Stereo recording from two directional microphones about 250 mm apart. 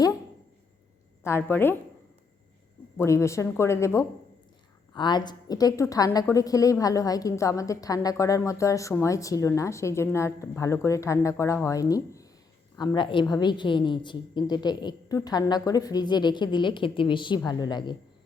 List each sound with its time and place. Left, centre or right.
1.2 s a woman's voice: centre
3.0 s a woman's voice: centre